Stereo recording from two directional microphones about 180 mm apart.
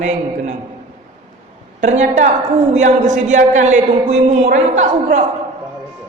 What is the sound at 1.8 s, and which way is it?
A man's voice, 40° right (ahead or behind).